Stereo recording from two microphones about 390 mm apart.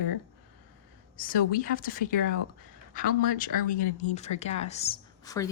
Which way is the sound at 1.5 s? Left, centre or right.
Left.